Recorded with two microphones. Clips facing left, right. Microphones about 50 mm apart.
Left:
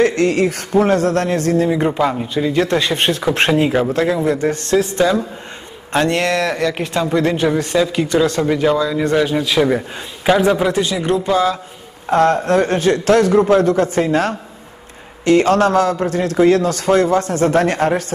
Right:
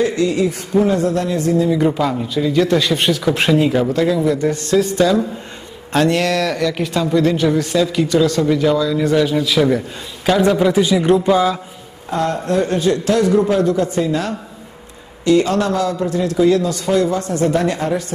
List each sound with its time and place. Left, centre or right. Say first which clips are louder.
0.0 s a man's voice: left 2 dB; left
1.9 s a man's voice: left 1 dB; centre; by 4.8 s left
4.9 s speech: right 1 dB; left
7.4 s a man's voice: even; left
10.4 s a man's voice: right 1 dB; centre
10.7 s speech: right 4 dB; centre
12.1 s a man's voice: left 5 dB; left